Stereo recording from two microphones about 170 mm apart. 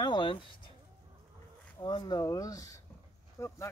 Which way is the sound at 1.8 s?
25° left (ahead or behind).